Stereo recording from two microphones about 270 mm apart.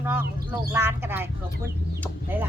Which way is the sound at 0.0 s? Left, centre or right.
Centre.